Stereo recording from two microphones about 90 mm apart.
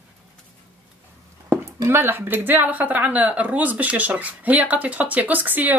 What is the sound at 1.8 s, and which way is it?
Speech, 25° right (ahead or behind).